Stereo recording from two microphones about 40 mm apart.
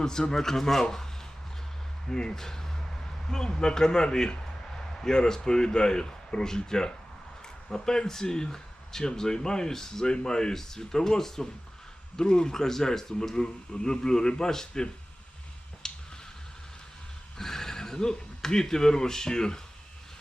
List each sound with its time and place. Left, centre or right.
0.0 s speech: centre
2.0 s speech: centre
13.3 s speech: centre
15.8 s finger snapping: centre
17.3 s speech: centre